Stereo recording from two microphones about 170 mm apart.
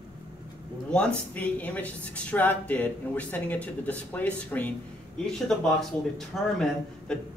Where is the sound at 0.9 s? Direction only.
5° left (ahead or behind).